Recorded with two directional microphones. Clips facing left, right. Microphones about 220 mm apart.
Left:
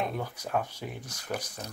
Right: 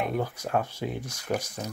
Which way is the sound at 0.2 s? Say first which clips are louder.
Right 4 dB; 10° right (ahead or behind).